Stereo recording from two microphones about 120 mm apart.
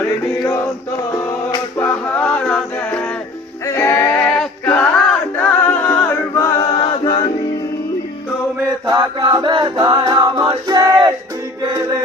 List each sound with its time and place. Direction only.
1.7 s music: 15° left (ahead or behind)
3.7 s music: 25° left (ahead or behind)
4.2 s male singing: 10° left (ahead or behind)
5.4 s a capella: 15° left (ahead or behind); by 7.2 s 40° left (ahead or behind)
8.6 s chant: 30° right (ahead or behind)
9.2 s chant: 40° right (ahead or behind)
9.8 s male singing: 40° right (ahead or behind)